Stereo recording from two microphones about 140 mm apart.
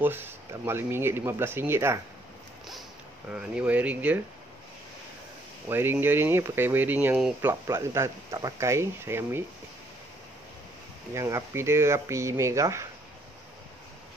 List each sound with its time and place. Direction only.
0.0 s speech: 15° right (ahead or behind)
3.3 s speech: 10° right (ahead or behind)
5.7 s speech: 15° right (ahead or behind)
11.1 s speech: 20° right (ahead or behind)